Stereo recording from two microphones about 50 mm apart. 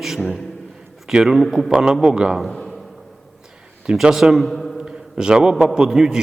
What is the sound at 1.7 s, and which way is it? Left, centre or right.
Speech, centre.